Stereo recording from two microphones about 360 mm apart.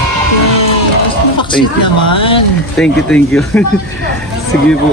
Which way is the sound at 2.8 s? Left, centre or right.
Centre.